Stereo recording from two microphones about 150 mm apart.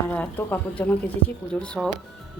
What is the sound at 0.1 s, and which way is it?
A woman's voice, 10° left (ahead or behind).